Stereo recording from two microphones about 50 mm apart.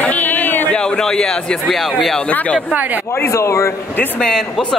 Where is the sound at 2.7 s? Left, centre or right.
Right.